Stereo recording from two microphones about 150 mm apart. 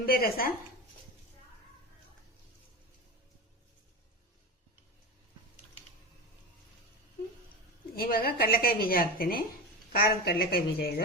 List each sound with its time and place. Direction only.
0.0 s a woman's voice: 85° left
7.9 s a woman's voice: 85° left
9.9 s a woman's voice: 90° left